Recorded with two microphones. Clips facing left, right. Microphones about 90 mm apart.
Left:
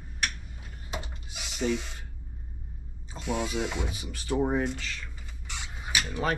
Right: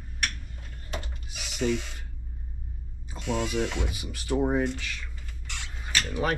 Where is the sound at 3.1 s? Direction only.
5° left (ahead or behind).